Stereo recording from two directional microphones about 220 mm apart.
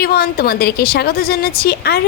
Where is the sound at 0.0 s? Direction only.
45° left (ahead or behind).